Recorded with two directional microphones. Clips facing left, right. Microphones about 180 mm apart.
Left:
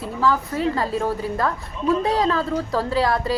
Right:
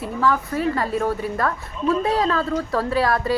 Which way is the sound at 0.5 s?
25° left (ahead or behind).